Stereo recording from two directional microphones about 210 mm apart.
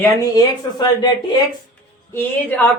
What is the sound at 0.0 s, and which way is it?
A woman's voice, 20° left (ahead or behind).